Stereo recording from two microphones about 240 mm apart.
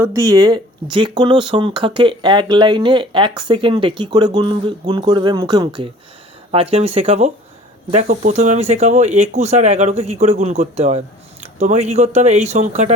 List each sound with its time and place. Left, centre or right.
0.0 s speech: centre